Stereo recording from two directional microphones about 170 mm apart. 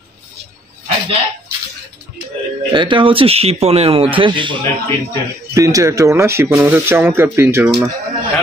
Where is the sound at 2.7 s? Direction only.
30° right (ahead or behind).